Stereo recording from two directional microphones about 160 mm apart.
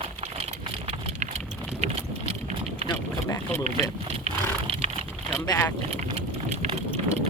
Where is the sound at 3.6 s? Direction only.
40° right (ahead or behind).